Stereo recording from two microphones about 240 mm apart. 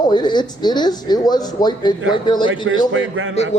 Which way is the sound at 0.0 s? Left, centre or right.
Centre.